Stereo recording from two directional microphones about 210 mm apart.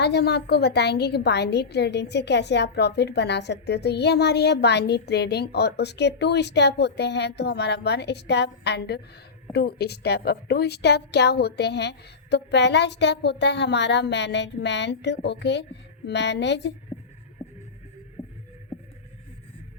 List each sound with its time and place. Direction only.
0.0 s a woman's voice: 50° left (ahead or behind)